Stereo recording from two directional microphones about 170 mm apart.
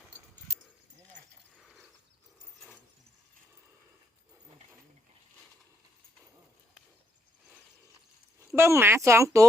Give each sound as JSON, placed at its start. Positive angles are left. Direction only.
{"t": 8.5, "sound": "speech", "side_deg": -15}